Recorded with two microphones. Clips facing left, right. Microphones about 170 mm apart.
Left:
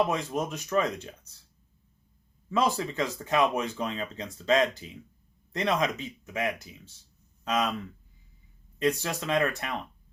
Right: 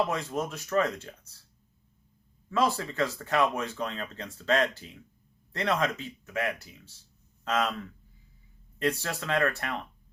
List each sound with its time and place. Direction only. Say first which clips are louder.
0.1 s speech: left 2 dB; 20° left (ahead or behind)
2.5 s speech: left 1 dB; 20° left (ahead or behind)
8.8 s speech: left 2 dB; 15° left (ahead or behind)